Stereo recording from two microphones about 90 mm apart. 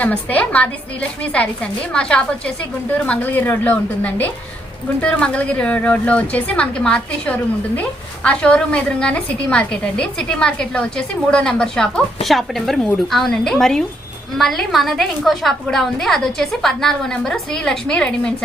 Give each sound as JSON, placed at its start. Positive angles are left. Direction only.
{"t": 0.0, "sound": "a woman's voice", "side_deg": 15}